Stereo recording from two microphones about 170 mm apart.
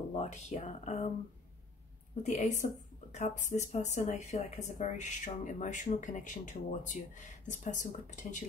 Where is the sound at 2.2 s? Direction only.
40° left (ahead or behind).